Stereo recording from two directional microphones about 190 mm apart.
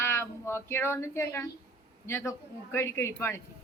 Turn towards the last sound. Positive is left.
turn(degrees=10)  # may be behind; listen again after turning